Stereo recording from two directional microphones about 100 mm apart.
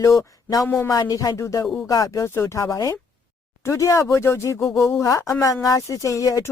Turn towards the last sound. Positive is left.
turn(degrees=35)  # may be behind; listen again after turning